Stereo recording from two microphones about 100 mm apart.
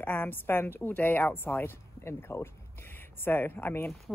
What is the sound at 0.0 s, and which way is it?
A woman's voice, 15° left (ahead or behind).